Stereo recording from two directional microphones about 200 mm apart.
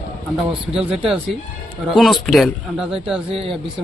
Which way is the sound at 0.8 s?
5° right (ahead or behind).